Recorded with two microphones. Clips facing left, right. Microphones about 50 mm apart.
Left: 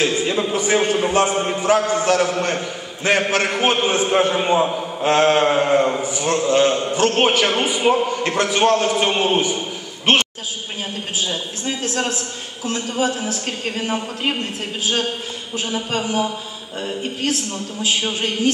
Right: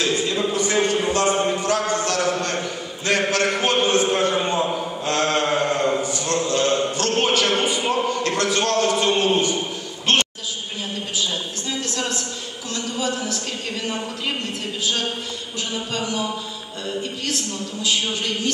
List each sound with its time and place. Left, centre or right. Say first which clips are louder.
0.0 s a man's voice: left 2 dB; left
11.1 s a woman's voice: left 2 dB; left
15.5 s a man's voice: left 5 dB; left